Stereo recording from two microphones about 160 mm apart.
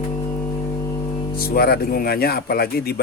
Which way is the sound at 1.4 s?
70° left (ahead or behind).